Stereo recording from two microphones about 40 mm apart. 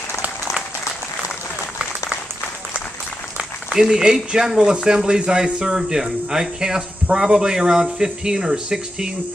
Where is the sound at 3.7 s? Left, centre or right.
Centre.